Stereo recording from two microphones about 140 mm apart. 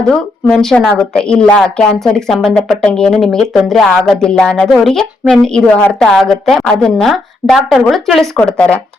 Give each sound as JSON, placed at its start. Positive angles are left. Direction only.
{"t": 0.1, "sound": "a woman's voice", "side_deg": 5}